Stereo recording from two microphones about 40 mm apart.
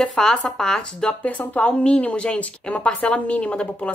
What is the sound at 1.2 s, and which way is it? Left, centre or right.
Speech, left.